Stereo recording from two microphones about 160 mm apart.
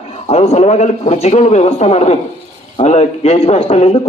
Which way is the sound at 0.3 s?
40° left (ahead or behind).